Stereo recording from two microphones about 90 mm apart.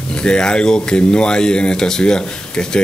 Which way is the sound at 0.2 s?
10° left (ahead or behind).